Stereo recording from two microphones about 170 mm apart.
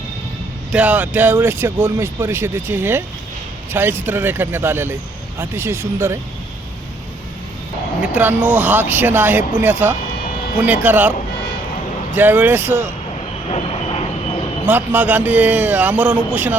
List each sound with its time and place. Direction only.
0.7 s speech: 10° right (ahead or behind)
8.0 s speech: 10° right (ahead or behind)
12.1 s speech: 10° right (ahead or behind)
13.5 s train: 35° left (ahead or behind)
14.7 s speech: 10° right (ahead or behind)